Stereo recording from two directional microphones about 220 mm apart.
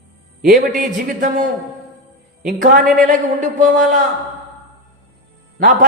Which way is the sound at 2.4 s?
40° right (ahead or behind).